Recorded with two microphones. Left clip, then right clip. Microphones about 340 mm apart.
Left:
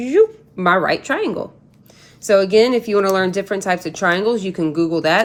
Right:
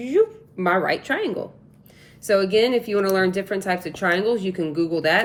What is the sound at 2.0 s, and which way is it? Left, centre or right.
Speech, centre.